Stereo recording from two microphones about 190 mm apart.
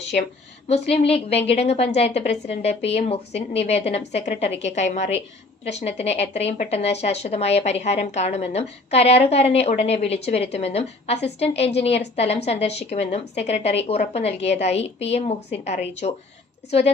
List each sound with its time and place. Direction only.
0.1 s speech: 50° left (ahead or behind)
0.7 s a woman's voice: 30° left (ahead or behind)